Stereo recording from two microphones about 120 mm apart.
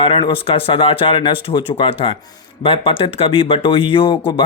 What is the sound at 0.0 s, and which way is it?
Speech, 50° left (ahead or behind).